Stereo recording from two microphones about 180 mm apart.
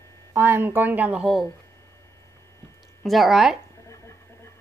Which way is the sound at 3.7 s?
15° left (ahead or behind).